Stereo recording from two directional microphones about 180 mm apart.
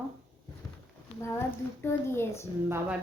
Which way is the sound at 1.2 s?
15° left (ahead or behind).